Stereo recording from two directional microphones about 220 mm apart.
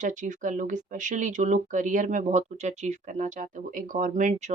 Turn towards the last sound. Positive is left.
turn(degrees=-35)  # may be behind; listen again after turning